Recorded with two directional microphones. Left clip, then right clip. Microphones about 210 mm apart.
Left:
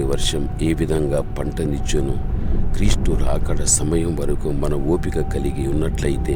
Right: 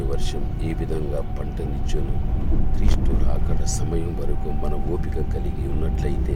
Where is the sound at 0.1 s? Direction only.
45° left (ahead or behind).